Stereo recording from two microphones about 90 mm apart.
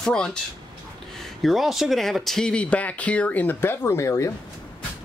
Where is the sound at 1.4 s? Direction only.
Centre (ahead or behind); by 4.3 s 35° left (ahead or behind).